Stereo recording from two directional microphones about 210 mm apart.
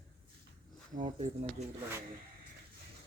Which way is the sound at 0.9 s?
35° right (ahead or behind).